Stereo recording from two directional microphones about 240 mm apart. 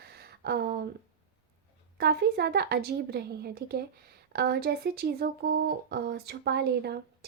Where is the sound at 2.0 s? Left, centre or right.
Right.